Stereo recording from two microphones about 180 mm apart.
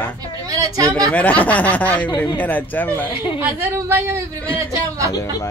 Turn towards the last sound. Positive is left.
turn(degrees=20)  # may be behind; listen again after turning